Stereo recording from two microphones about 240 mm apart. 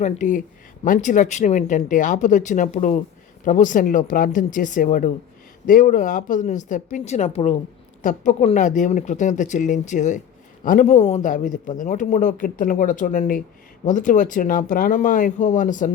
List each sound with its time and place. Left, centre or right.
0.0 s speech: left